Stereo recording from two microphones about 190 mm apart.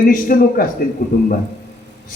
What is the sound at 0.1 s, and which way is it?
A man's voice, 45° left (ahead or behind).